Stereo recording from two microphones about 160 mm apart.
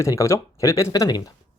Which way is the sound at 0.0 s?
20° left (ahead or behind).